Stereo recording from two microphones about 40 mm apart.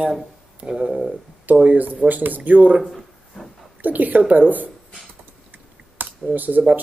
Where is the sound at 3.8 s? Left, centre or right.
Right.